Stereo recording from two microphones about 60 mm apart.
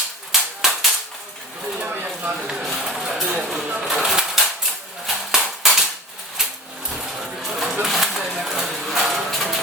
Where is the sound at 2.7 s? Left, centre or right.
Centre.